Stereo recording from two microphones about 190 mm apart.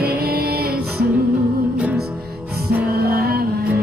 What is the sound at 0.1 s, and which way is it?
Music, 55° right (ahead or behind).